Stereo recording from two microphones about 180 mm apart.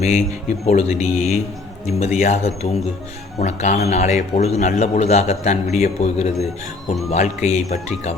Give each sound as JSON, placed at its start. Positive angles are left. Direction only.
{"t": 0.0, "sound": "a man's voice", "side_deg": 40}